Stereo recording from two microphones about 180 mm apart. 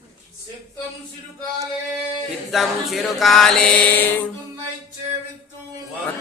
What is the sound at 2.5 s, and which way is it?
Mantra, centre (ahead or behind).